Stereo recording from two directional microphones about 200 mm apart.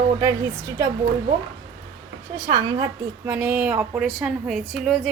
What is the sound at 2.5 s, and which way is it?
A woman's voice, 20° right (ahead or behind).